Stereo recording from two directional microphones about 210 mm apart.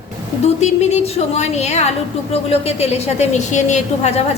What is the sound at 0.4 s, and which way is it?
A woman's voice, 30° left (ahead or behind).